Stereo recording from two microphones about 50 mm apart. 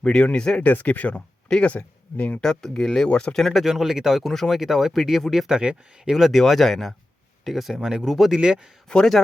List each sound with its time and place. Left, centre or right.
0.0 s speech: centre
0.6 s speech: left
2.4 s speech: centre
3.1 s speech: centre
3.3 s speech: centre
3.7 s speech: centre
4.3 s speech: centre
5.5 s speech: centre
6.1 s speech: centre
6.4 s speech: centre
8.4 s speech: centre
9.2 s speech: centre